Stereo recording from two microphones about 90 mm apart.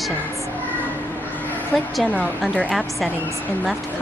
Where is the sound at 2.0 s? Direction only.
15° left (ahead or behind).